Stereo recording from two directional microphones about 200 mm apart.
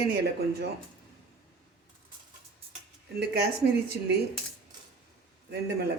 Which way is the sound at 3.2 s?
55° right (ahead or behind).